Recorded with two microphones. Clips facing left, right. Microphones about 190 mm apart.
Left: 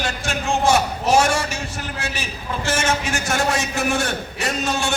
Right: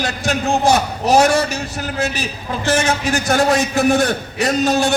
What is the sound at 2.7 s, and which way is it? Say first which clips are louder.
A man's voice: right 5 dB; 35° right (ahead or behind).